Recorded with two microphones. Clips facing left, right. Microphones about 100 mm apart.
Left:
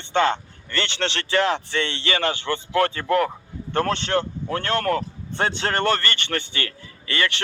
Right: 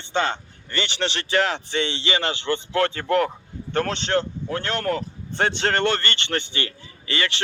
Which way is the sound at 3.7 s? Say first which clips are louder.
Left 1 dB; 55° left (ahead or behind).